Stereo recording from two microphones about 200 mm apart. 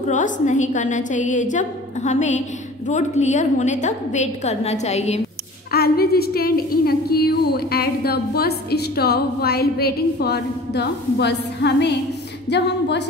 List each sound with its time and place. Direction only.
0.1 s a woman's voice: 40° left (ahead or behind)
5.7 s a woman's voice: 50° left (ahead or behind)